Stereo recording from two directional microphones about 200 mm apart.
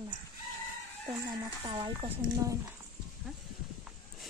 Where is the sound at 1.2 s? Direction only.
25° right (ahead or behind).